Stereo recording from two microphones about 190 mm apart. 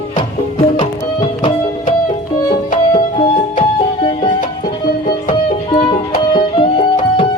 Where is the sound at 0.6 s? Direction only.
25° left (ahead or behind).